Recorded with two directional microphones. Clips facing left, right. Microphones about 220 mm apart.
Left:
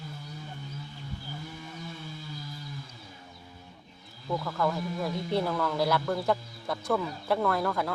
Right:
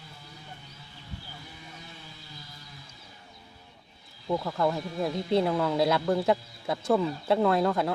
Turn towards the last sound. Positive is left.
turn(degrees=-20)  # may be behind; listen again after turning